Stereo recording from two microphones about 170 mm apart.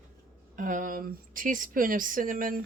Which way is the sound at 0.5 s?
50° right (ahead or behind).